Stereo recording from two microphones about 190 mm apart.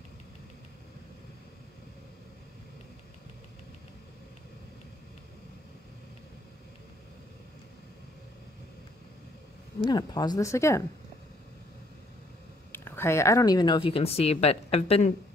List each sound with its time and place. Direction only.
9.8 s speech: 20° left (ahead or behind)
12.7 s speech: 10° left (ahead or behind); by 15.1 s 35° left (ahead or behind)